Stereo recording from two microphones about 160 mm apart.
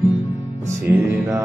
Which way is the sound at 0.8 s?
10° right (ahead or behind).